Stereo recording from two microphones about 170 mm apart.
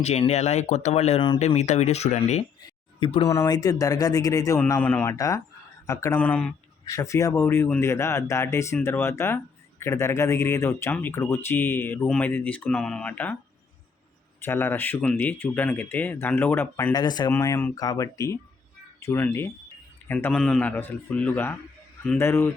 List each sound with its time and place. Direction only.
0.0 s speech: 40° left (ahead or behind)
3.2 s speech: 20° left (ahead or behind)
14.4 s speech: 15° left (ahead or behind)